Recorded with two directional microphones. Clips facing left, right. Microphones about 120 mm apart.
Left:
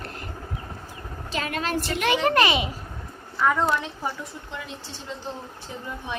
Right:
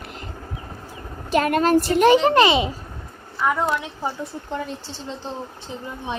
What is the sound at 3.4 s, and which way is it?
Speech, 10° right (ahead or behind).